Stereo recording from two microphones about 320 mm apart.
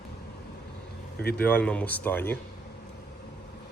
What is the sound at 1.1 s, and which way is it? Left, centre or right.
Speech, left.